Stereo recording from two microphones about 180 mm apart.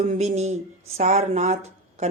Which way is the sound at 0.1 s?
40° right (ahead or behind).